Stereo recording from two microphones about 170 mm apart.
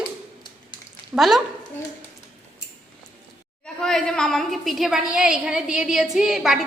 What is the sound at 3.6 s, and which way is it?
A woman's voice, 5° left (ahead or behind).